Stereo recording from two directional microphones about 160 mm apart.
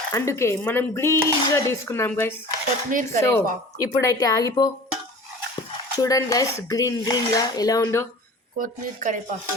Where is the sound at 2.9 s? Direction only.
55° right (ahead or behind).